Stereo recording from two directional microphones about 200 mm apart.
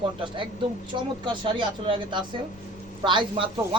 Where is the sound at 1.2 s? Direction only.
25° right (ahead or behind).